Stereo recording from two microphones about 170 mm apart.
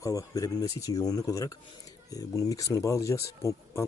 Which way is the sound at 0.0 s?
20° left (ahead or behind).